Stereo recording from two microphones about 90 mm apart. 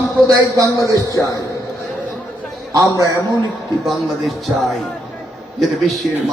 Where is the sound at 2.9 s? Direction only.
40° right (ahead or behind).